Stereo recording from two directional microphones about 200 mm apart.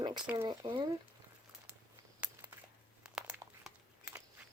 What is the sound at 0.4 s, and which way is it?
Speech, 20° right (ahead or behind).